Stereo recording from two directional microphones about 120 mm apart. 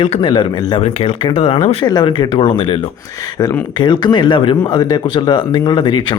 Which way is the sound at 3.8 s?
40° left (ahead or behind).